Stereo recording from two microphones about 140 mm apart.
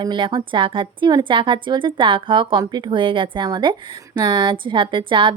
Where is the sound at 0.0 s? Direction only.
35° right (ahead or behind).